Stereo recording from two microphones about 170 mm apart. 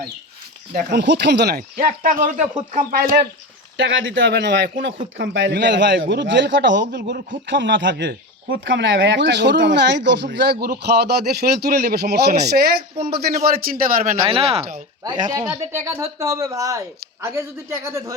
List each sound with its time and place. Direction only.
0.7 s speech: 55° right (ahead or behind)
0.9 s speech: 90° right; by 3.2 s 60° right (ahead or behind)
3.8 s speech: 90° right; by 14.2 s 55° right (ahead or behind)
14.3 s speech: 35° right (ahead or behind)
15.3 s speech: 15° right (ahead or behind)